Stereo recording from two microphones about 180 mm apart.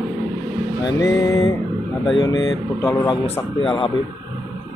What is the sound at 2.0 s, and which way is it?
Speech, 25° left (ahead or behind).